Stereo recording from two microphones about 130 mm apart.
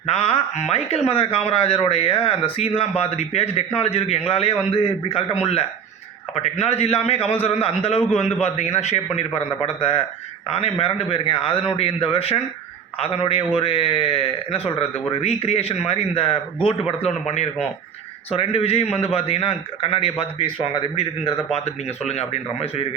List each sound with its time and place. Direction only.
0.0 s a man's voice: 50° left (ahead or behind)
22.0 s speech: 55° left (ahead or behind)